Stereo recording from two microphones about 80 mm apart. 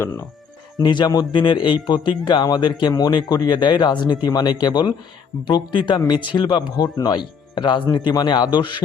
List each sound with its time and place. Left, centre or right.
0.8 s speech: left
1.9 s speech: left
2.9 s speech: left
6.7 s speech: left